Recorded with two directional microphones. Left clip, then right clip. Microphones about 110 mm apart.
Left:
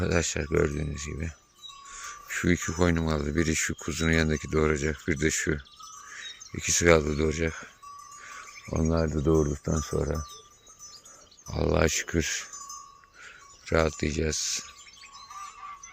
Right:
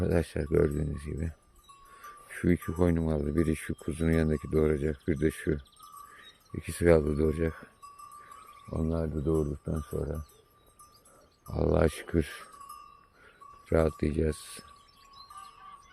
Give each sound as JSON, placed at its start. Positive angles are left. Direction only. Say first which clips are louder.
{"t": 0.0, "sound": "speech", "louder": "left 2 dB", "side_deg": -40}
{"t": 8.7, "sound": "speech", "louder": "left 5 dB", "side_deg": 50}
{"t": 9.0, "sound": "speech", "louder": "left 5 dB", "side_deg": 35}
{"t": 9.9, "sound": "speech", "louder": "left 5 dB", "side_deg": 45}
{"t": 11.4, "sound": "speech", "louder": "left 1 dB", "side_deg": -20}
{"t": 13.7, "sound": "speech", "louder": "left 2 dB", "side_deg": -45}